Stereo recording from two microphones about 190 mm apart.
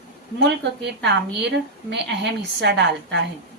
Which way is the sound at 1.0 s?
65° right (ahead or behind).